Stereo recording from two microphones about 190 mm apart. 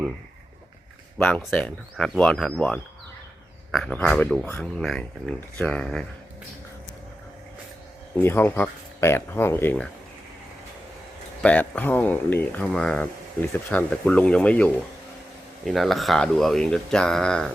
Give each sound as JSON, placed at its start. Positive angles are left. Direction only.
{"t": 1.5, "sound": "speech", "side_deg": 5}
{"t": 8.1, "sound": "speech", "side_deg": 10}
{"t": 11.4, "sound": "speech", "side_deg": 5}